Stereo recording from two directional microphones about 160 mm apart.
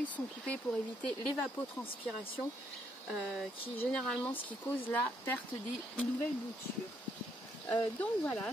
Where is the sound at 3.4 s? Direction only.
5° left (ahead or behind).